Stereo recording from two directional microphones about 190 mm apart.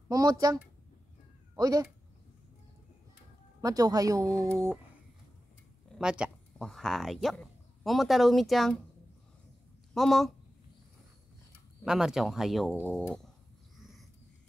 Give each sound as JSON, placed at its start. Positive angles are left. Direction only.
{"t": 0.1, "sound": "speech", "side_deg": -20}
{"t": 3.6, "sound": "speech", "side_deg": -20}
{"t": 5.9, "sound": "speech", "side_deg": -5}
{"t": 9.9, "sound": "speech", "side_deg": 0}
{"t": 11.8, "sound": "speech", "side_deg": -5}
{"t": 13.0, "sound": "a sound", "side_deg": 5}